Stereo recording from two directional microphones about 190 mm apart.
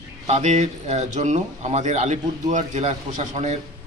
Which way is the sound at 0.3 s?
40° right (ahead or behind).